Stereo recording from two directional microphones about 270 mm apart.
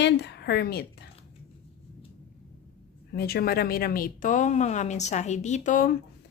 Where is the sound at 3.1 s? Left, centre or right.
Left.